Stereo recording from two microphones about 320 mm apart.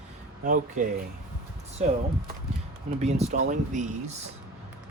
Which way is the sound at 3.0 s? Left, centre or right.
Right.